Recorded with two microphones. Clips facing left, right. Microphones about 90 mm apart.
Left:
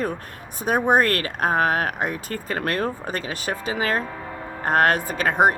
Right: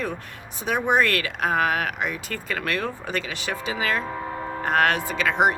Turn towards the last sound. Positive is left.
turn(degrees=45)  # may be behind; listen again after turning